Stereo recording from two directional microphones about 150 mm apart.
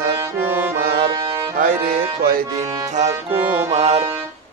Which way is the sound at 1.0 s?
35° right (ahead or behind).